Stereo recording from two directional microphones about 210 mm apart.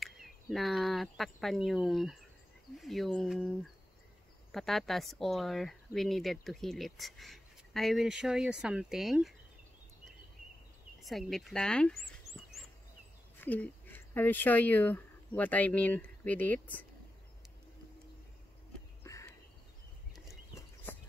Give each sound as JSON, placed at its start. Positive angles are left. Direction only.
{"t": 0.0, "sound": "speech", "side_deg": 0}
{"t": 11.0, "sound": "speech", "side_deg": 0}
{"t": 13.4, "sound": "speech", "side_deg": 10}
{"t": 19.0, "sound": "a sound", "side_deg": 15}